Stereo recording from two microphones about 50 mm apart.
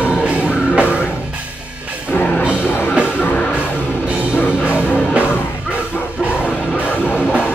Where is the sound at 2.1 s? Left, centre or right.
Left.